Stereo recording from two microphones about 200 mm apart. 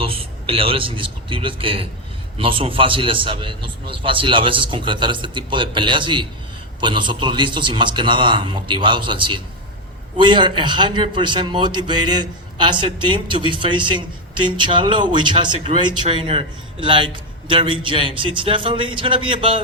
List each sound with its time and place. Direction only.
0.0 s a man's voice: 30° right (ahead or behind)